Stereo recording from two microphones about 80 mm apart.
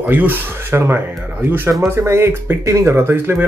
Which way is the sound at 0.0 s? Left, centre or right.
Right.